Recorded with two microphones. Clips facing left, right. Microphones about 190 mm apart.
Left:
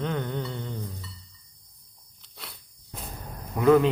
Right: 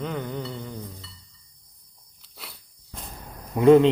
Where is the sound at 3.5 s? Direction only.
25° right (ahead or behind).